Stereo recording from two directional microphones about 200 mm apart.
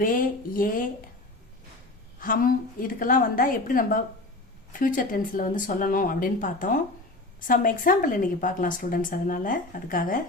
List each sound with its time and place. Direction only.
0.0 s a woman's voice: 45° left (ahead or behind)
2.2 s a woman's voice: 45° left (ahead or behind)